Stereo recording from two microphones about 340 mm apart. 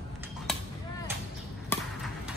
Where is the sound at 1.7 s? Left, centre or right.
Centre.